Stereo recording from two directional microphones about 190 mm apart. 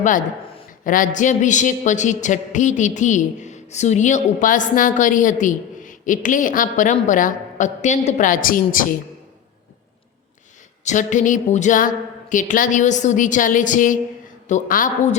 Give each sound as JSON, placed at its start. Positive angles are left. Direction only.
{"t": 0.0, "sound": "a woman's voice", "side_deg": 45}
{"t": 10.8, "sound": "a man's voice", "side_deg": 40}